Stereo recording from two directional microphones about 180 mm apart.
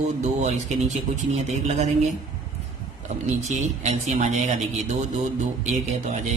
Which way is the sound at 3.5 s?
40° right (ahead or behind).